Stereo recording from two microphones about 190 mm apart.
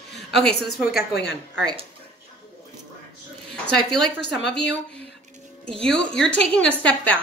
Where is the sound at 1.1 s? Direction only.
60° left (ahead or behind).